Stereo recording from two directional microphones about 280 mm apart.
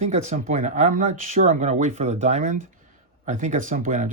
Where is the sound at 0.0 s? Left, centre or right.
Right.